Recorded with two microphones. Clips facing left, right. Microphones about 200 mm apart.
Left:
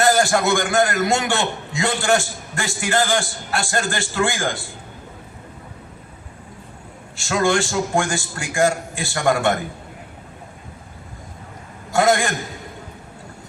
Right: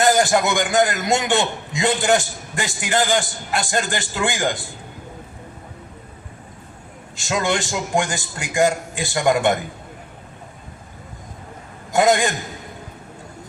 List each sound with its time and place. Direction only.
0.0 s a man's voice: 20° right (ahead or behind)
7.2 s a man's voice: 20° right (ahead or behind)
11.9 s a man's voice: 20° right (ahead or behind)